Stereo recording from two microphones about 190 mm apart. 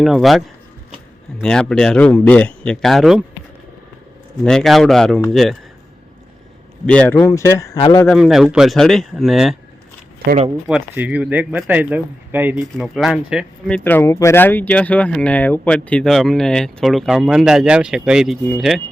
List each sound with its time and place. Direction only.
0.0 s speech: centre (ahead or behind)
4.4 s speech: centre (ahead or behind)
6.8 s a man's voice: 5° left (ahead or behind); by 8.0 s 25° left (ahead or behind)
8.0 s speech: centre (ahead or behind)
10.2 s speech: 35° right (ahead or behind)
10.7 s speech: 5° right (ahead or behind)